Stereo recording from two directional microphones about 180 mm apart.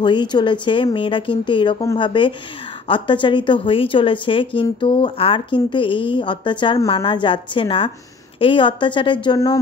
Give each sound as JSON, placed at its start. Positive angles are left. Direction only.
{"t": 0.0, "sound": "a woman's voice", "side_deg": 25}